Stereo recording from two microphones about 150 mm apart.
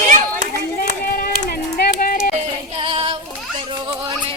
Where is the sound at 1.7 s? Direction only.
80° left.